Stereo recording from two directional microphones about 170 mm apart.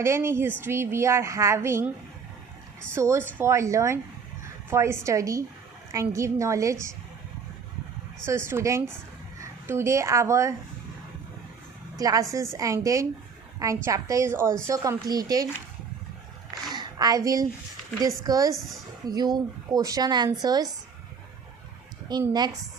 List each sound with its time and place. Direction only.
0.0 s a woman's voice: 15° right (ahead or behind)
2.9 s a woman's voice: 15° right (ahead or behind)
8.4 s a woman's voice: 15° right (ahead or behind)
11.9 s a woman's voice: 20° right (ahead or behind)
16.6 s a sound: 25° right (ahead or behind)
18.0 s a woman's voice: 20° right (ahead or behind)
22.3 s a woman's voice: 25° right (ahead or behind)